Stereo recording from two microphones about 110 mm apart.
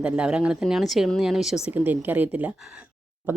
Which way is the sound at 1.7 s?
15° right (ahead or behind).